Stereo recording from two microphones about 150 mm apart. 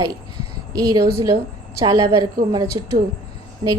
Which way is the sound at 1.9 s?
25° right (ahead or behind).